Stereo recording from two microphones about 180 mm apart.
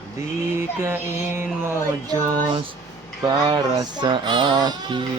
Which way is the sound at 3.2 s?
25° right (ahead or behind).